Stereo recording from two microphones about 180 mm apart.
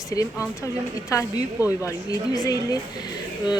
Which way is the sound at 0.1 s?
15° left (ahead or behind).